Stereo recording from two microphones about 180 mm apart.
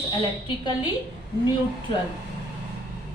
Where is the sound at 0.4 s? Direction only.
25° left (ahead or behind).